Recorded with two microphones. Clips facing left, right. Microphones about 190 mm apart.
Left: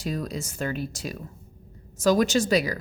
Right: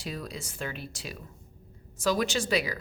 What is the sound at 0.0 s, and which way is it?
A woman's voice, 45° left (ahead or behind).